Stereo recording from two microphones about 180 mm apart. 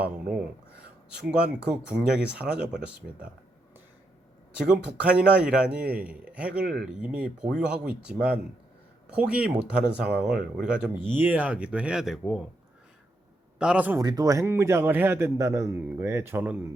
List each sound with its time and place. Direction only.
0.0 s a man's voice: 5° right (ahead or behind)
4.6 s a man's voice: 5° right (ahead or behind)
13.6 s a man's voice: 5° right (ahead or behind)
14.0 s a man's voice: 20° right (ahead or behind)